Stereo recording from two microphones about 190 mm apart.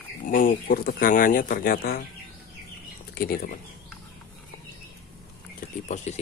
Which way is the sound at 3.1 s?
50° left (ahead or behind).